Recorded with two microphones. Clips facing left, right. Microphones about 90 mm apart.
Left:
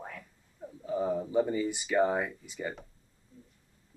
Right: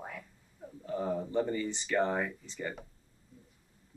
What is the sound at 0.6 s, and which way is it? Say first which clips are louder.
Speech: left 4 dB; 10° left (ahead or behind).